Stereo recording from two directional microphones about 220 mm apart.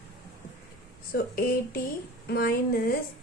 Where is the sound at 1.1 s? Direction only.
45° left (ahead or behind).